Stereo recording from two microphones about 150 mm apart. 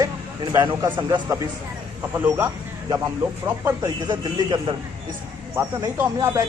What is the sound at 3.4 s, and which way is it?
Speech, 25° right (ahead or behind).